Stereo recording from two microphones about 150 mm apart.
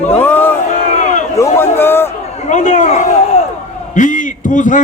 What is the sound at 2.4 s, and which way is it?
A man's voice, 55° left (ahead or behind).